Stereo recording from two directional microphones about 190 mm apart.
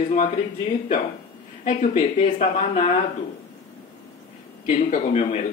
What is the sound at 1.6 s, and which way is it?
A man's voice, 35° left (ahead or behind).